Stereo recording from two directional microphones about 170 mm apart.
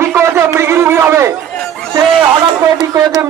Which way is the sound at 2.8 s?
15° right (ahead or behind).